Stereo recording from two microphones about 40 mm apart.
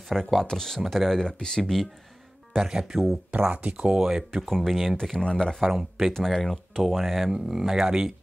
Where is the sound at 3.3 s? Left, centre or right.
Right.